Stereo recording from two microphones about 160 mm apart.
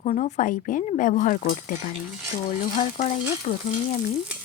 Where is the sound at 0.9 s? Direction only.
55° left (ahead or behind).